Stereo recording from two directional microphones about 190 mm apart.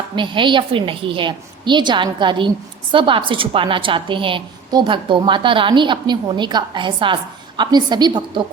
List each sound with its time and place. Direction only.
0.2 s a woman's voice: 25° right (ahead or behind)